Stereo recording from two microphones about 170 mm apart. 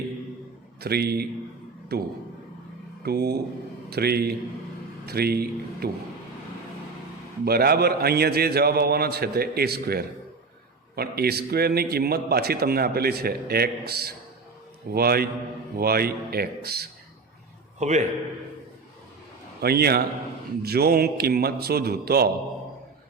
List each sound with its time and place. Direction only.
0.8 s a man's voice: 70° right (ahead or behind)
7.4 s a man's voice: 65° right (ahead or behind)
17.7 s a man's voice: 45° right (ahead or behind)
19.6 s a man's voice: 65° right (ahead or behind)